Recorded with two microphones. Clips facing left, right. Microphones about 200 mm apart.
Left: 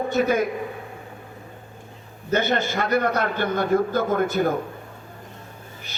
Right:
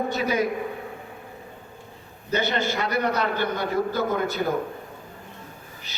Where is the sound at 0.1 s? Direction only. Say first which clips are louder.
Left 4 dB; 50° left (ahead or behind).